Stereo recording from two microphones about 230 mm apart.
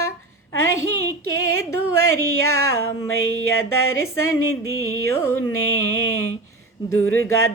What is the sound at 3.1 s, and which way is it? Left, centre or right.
Music, left.